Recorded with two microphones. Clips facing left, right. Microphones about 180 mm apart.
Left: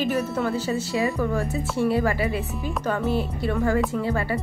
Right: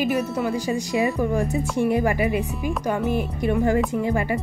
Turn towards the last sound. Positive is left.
turn(degrees=-15)  # may be behind; listen again after turning